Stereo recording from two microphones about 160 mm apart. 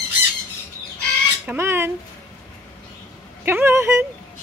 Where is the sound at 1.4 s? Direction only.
15° right (ahead or behind).